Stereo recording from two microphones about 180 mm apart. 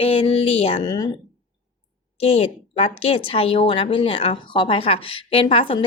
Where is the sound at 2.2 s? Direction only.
35° left (ahead or behind).